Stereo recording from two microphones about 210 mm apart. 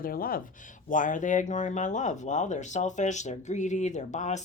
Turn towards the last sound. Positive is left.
turn(degrees=35)  # may be behind; listen again after turning